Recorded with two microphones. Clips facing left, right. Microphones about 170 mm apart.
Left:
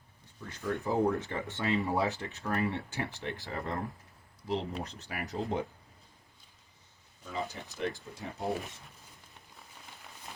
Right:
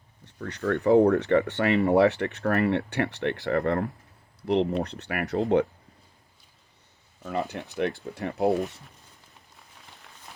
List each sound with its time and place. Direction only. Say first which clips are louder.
0.3 s speech: right 8 dB; 75° right (ahead or behind)
7.3 s speech: right 7 dB; 65° right (ahead or behind)